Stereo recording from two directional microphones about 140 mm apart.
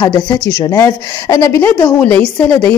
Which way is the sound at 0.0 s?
30° left (ahead or behind).